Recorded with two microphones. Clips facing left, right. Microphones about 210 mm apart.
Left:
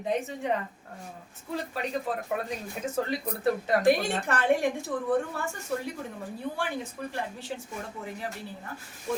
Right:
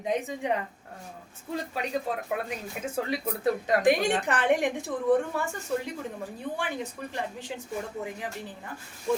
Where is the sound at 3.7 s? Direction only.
15° right (ahead or behind).